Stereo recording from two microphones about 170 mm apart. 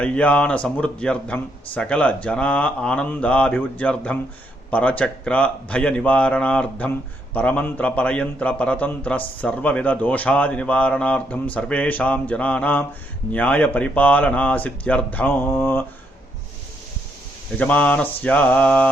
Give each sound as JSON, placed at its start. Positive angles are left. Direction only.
{"t": 0.0, "sound": "speech", "side_deg": 5}
{"t": 17.6, "sound": "speech", "side_deg": 10}